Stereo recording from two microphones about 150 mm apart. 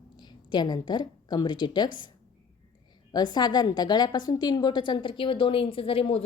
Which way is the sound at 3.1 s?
30° left (ahead or behind).